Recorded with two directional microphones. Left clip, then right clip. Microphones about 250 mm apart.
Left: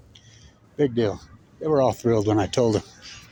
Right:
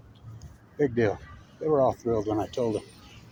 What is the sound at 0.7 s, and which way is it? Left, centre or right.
Speech, left.